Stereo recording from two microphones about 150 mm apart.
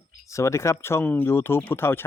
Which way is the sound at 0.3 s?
20° left (ahead or behind).